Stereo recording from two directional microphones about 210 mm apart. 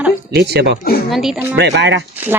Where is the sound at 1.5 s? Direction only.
55° right (ahead or behind).